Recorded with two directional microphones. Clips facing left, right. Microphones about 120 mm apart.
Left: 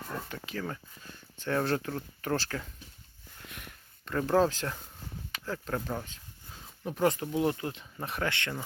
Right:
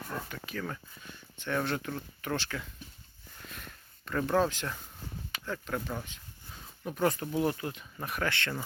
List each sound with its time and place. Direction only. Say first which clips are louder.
0.3 s speech: left 1 dB; 30° left (ahead or behind)
3.5 s a sound: even; 20° left (ahead or behind)
5.5 s speech: left 2 dB; 35° left (ahead or behind)
6.8 s speech: left 2 dB; 25° left (ahead or behind)